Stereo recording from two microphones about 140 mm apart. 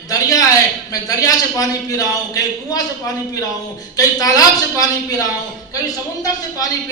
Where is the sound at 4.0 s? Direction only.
25° left (ahead or behind).